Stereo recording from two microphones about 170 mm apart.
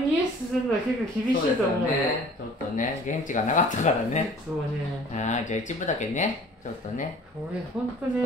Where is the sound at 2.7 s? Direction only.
50° left (ahead or behind).